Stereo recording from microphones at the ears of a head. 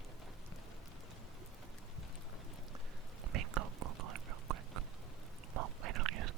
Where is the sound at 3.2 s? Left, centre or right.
Right.